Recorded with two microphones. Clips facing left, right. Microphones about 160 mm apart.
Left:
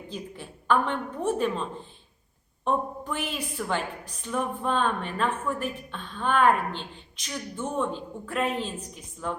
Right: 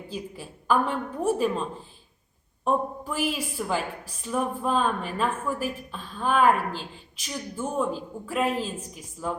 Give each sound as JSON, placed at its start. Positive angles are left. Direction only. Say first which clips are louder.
{"t": 0.1, "sound": "a woman's voice", "louder": "right 2 dB", "side_deg": -5}